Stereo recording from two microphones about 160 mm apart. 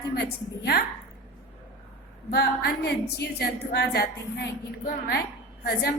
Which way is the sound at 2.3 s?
85° left.